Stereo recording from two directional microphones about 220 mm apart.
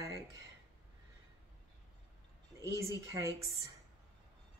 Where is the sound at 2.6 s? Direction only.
15° right (ahead or behind).